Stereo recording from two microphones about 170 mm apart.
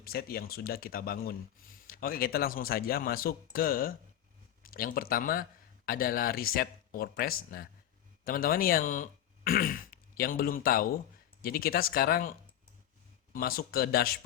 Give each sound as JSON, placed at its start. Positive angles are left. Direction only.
{"t": 0.0, "sound": "a man's voice", "side_deg": 65}